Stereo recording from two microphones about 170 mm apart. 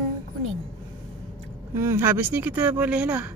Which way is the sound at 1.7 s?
15° right (ahead or behind).